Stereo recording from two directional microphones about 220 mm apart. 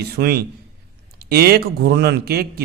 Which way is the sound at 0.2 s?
45° right (ahead or behind).